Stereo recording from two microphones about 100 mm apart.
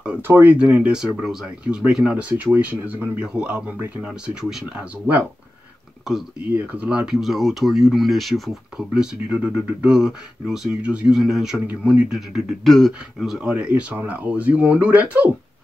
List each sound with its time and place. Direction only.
0.2 s speech: 20° right (ahead or behind)
6.5 s speech: 15° right (ahead or behind)
11.9 s speech: 15° right (ahead or behind)
12.6 s speech: 5° left (ahead or behind); by 15.3 s 15° right (ahead or behind)